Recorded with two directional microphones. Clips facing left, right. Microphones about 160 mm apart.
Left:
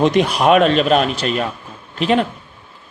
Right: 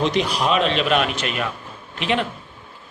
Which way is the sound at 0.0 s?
55° left (ahead or behind).